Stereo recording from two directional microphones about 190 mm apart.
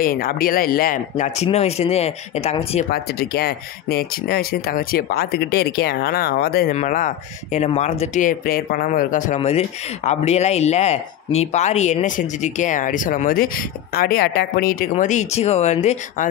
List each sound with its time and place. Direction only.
0.0 s speech: 50° left (ahead or behind); by 2.9 s 35° left (ahead or behind)
2.9 s speech: 55° left (ahead or behind)
6.7 s speech: 40° left (ahead or behind)